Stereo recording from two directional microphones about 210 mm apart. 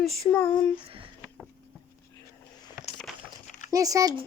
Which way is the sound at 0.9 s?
25° right (ahead or behind).